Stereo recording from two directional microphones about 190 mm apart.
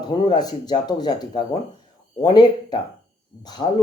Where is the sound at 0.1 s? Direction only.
20° left (ahead or behind).